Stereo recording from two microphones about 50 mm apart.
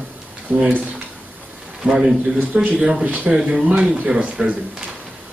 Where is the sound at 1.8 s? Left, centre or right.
Centre.